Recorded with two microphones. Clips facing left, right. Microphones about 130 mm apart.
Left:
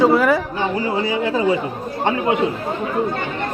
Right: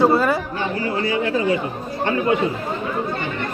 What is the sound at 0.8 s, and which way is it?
Speech, 15° left (ahead or behind).